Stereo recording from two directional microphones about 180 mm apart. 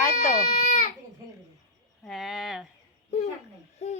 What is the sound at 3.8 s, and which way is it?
Speech, 35° left (ahead or behind).